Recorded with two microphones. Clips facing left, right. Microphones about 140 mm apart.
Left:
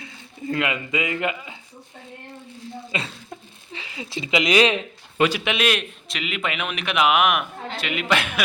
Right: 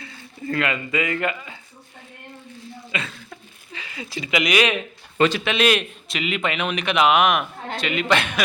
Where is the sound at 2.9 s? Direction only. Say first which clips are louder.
Even; 30° left (ahead or behind).